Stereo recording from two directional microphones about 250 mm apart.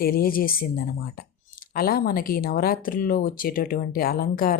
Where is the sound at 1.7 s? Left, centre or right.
Left.